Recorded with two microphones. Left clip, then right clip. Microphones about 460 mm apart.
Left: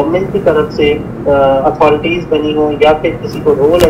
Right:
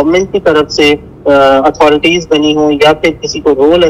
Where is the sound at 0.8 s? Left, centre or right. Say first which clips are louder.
Right 3 dB; right.